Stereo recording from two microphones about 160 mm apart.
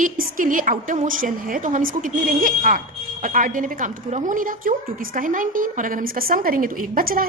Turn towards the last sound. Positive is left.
turn(degrees=-65)  # may be behind; listen again after turning